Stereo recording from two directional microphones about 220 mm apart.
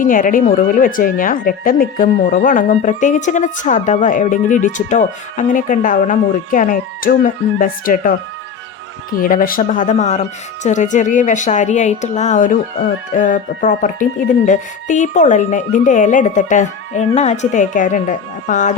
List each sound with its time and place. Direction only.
0.0 s speech: 40° left (ahead or behind)
9.2 s speech: 40° left (ahead or behind)